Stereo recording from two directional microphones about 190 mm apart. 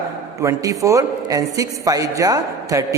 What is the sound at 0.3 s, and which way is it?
A man's voice, 15° right (ahead or behind).